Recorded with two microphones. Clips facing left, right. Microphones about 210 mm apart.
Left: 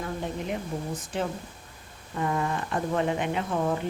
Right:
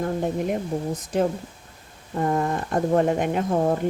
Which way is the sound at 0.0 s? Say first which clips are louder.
Right 8 dB; 50° right (ahead or behind).